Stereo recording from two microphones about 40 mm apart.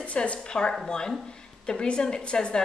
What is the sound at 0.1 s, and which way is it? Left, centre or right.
A woman's voice, left.